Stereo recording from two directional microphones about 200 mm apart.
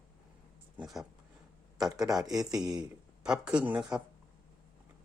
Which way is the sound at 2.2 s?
20° right (ahead or behind).